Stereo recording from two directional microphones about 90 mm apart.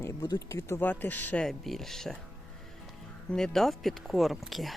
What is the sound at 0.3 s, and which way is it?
Speech, 35° left (ahead or behind).